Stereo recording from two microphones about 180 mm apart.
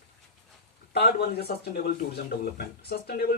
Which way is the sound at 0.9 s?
60° left (ahead or behind).